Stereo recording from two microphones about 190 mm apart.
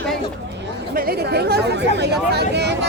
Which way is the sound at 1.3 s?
60° right (ahead or behind).